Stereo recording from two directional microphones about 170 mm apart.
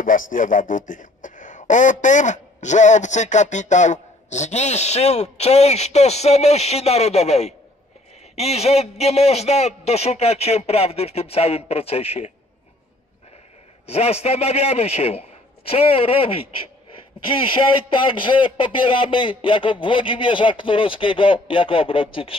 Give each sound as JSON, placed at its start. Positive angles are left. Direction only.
{"t": 0.0, "sound": "speech", "side_deg": 50}
{"t": 13.8, "sound": "speech", "side_deg": 35}
{"t": 17.4, "sound": "speech", "side_deg": 30}